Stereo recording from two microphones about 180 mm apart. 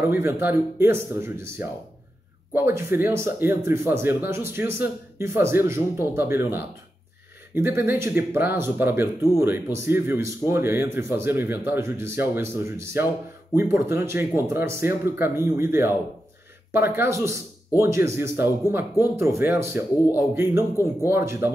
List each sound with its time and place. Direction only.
0.0 s speech: 10° right (ahead or behind)